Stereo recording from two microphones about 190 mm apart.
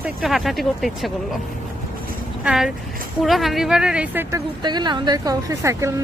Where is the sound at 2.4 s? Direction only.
5° right (ahead or behind).